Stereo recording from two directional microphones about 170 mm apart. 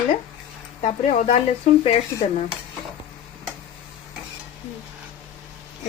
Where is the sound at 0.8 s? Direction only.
40° left (ahead or behind).